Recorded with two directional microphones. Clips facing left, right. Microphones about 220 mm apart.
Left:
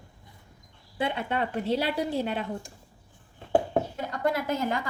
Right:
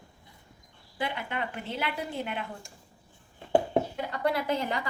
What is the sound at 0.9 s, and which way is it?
A woman's voice, 25° left (ahead or behind).